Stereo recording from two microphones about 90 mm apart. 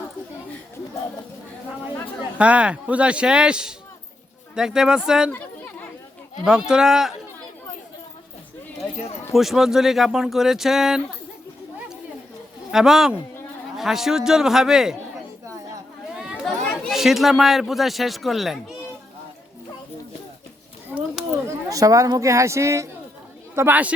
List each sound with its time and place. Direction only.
2.4 s speech: 15° right (ahead or behind)
5.3 s chatter: 20° left (ahead or behind)
6.4 s speech: 10° right (ahead or behind)
9.3 s speech: 5° right (ahead or behind)
12.7 s speech: 5° right (ahead or behind)
16.4 s chatter: 5° left (ahead or behind)
16.9 s speech: 5° right (ahead or behind)
20.9 s a sound: 5° right (ahead or behind)
21.4 s speech: 40° right (ahead or behind)
23.6 s speech: 20° right (ahead or behind)